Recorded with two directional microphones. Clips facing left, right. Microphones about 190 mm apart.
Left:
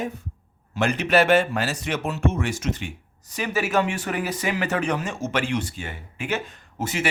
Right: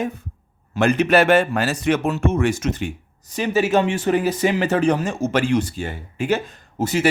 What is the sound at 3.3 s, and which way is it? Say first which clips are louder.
Speech: right 5 dB; 25° right (ahead or behind).